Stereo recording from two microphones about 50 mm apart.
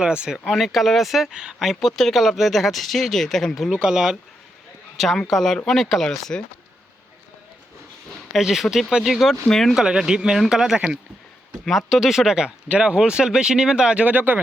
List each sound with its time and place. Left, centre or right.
0.0 s speech: centre
0.3 s speech: centre
1.3 s speech: centre
1.5 s speech: centre
3.7 s speech: centre
4.9 s a man's voice: centre
8.4 s speech: centre
9.7 s speech: centre
12.6 s speech: right
14.0 s speech: right